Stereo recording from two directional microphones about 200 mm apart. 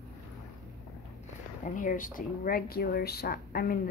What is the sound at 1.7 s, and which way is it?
Speech, 40° left (ahead or behind).